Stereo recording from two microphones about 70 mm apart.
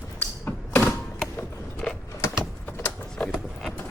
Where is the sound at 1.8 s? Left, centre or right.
Centre.